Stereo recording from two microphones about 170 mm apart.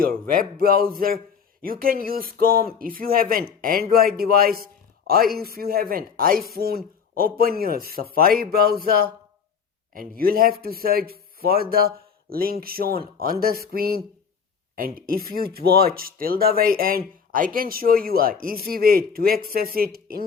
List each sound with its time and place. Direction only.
0.0 s speech: 60° right (ahead or behind)